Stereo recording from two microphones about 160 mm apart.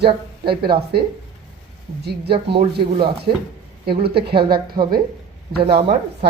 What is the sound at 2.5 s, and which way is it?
Speech, 30° right (ahead or behind).